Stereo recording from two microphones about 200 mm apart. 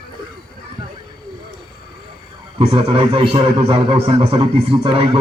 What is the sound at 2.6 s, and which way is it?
A man's voice, 30° right (ahead or behind).